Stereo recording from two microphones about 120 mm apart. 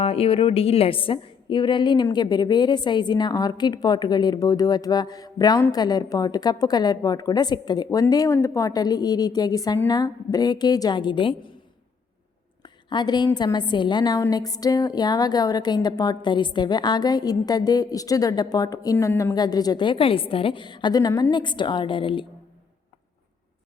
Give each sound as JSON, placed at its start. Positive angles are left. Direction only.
{"t": 0.0, "sound": "a woman's voice", "side_deg": 55}
{"t": 12.6, "sound": "a woman's voice", "side_deg": 40}